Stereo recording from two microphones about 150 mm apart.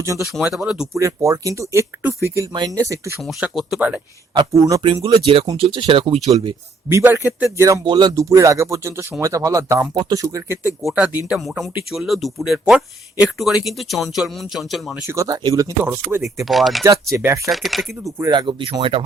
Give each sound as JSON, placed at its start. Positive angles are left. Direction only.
{"t": 0.3, "sound": "speech", "side_deg": 0}
{"t": 0.9, "sound": "speech", "side_deg": -20}
{"t": 3.2, "sound": "speech", "side_deg": 0}
{"t": 4.4, "sound": "speech", "side_deg": -20}
{"t": 5.0, "sound": "speech", "side_deg": -35}
{"t": 6.8, "sound": "speech", "side_deg": -15}
{"t": 7.7, "sound": "speech", "side_deg": -30}
{"t": 10.8, "sound": "speech", "side_deg": -10}
{"t": 15.0, "sound": "speech", "side_deg": -20}
{"t": 16.5, "sound": "speech", "side_deg": 0}
{"t": 16.8, "sound": "speech", "side_deg": -20}
{"t": 17.5, "sound": "speech", "side_deg": 0}
{"t": 18.3, "sound": "speech", "side_deg": -30}